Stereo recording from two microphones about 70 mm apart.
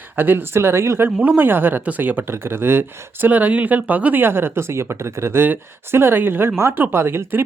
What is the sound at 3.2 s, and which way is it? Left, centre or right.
Speech, right.